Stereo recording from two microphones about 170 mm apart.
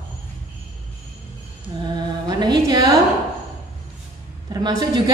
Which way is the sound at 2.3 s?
25° right (ahead or behind).